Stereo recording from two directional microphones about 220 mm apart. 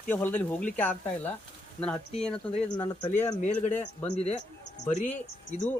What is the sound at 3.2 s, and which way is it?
Speech, 30° left (ahead or behind).